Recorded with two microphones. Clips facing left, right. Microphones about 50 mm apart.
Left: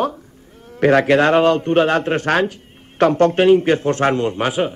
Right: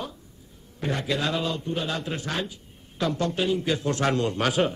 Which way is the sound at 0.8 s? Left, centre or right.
Left.